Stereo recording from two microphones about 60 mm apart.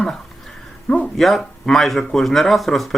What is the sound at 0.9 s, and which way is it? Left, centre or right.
Speech, centre.